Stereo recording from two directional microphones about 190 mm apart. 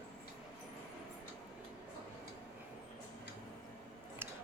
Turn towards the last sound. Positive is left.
turn(degrees=-10)  # may be behind; listen again after turning